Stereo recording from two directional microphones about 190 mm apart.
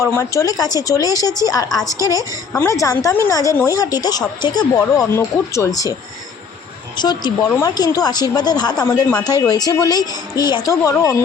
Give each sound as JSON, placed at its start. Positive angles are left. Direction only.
{"t": 0.0, "sound": "a woman's voice", "side_deg": 15}
{"t": 6.9, "sound": "a woman's voice", "side_deg": 20}